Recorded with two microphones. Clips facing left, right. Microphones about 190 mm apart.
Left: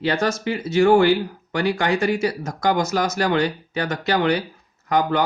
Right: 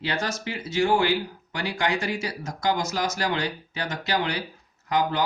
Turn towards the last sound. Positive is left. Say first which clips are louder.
# left 5 dB
turn(degrees=55)  # may be behind; listen again after turning